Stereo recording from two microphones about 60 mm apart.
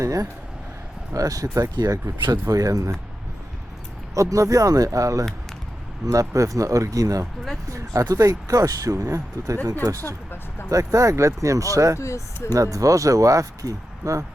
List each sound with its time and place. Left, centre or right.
0.0 s speech: right
4.1 s speech: right
10.7 s speech: right
11.9 s speech: left
12.5 s speech: right